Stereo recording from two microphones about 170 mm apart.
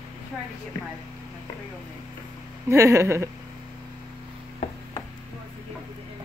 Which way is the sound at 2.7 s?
15° right (ahead or behind).